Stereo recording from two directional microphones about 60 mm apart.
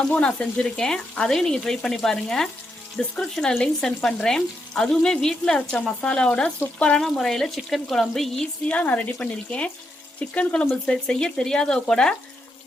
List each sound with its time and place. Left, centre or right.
0.1 s frying: left
7.0 s speech: centre
8.6 s speech: left
9.1 s frying: centre
10.2 s speech: left
10.8 s frying: centre